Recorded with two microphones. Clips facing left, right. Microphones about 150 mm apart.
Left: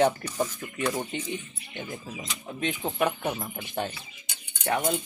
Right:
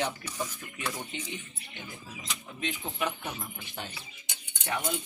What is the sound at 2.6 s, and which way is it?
Speech, 50° left (ahead or behind).